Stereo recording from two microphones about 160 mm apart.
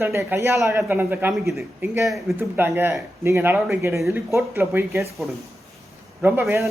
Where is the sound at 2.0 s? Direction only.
Centre (ahead or behind).